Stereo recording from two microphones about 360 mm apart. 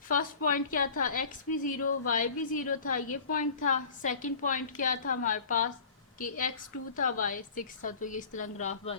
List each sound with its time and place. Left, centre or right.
0.1 s a woman's voice: left